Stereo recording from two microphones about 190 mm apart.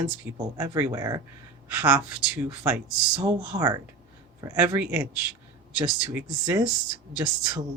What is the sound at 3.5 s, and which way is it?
Speech, 20° right (ahead or behind).